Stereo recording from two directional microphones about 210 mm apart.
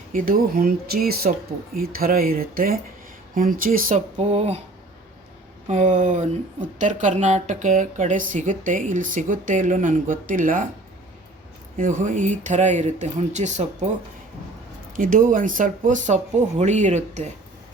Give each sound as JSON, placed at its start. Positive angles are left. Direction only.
{"t": 0.1, "sound": "speech", "side_deg": -40}
{"t": 5.6, "sound": "speech", "side_deg": -35}
{"t": 11.8, "sound": "speech", "side_deg": -35}
{"t": 14.9, "sound": "speech", "side_deg": -40}